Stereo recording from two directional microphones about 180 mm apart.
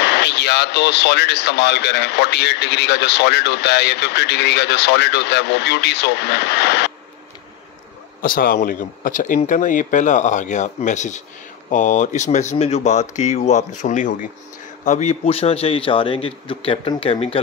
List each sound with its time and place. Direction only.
0.0 s speech: 70° left (ahead or behind)
8.2 s a man's voice: 50° left (ahead or behind); by 17.4 s 30° left (ahead or behind)